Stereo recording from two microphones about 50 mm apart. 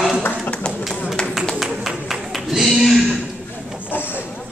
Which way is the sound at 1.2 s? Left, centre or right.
Centre.